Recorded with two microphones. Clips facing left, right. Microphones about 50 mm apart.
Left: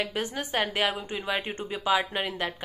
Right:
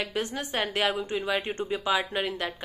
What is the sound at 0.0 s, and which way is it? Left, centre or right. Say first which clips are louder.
A woman's voice: even; left.